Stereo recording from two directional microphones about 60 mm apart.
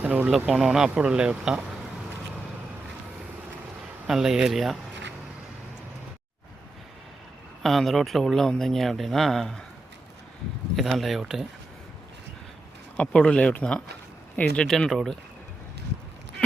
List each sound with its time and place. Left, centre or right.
0.0 s speech: right
0.4 s speech: centre
4.0 s speech: centre
7.6 s a man's voice: centre
10.8 s a man's voice: centre
13.0 s speech: centre
14.4 s speech: left
14.7 s a man's voice: centre